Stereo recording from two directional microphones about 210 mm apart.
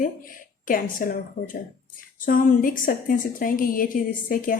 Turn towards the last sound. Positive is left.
turn(degrees=40)  # may be behind; listen again after turning